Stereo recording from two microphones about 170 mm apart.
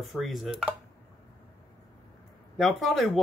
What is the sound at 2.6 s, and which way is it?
Speech, centre (ahead or behind).